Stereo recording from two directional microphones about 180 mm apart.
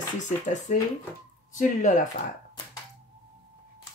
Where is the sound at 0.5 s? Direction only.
40° left (ahead or behind).